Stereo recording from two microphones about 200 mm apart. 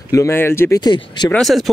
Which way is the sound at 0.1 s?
15° left (ahead or behind).